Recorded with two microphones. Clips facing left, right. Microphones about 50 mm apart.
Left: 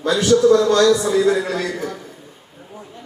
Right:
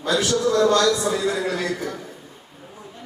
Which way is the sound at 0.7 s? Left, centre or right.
Centre.